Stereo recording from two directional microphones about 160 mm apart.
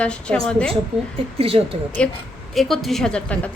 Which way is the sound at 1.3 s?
35° right (ahead or behind).